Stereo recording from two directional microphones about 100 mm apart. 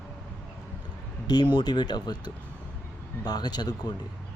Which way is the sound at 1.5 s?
45° left (ahead or behind).